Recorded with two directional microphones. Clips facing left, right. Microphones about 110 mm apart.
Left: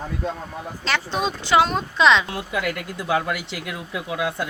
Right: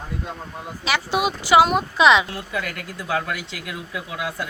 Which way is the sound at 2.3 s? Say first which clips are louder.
Left 3 dB; 15° left (ahead or behind).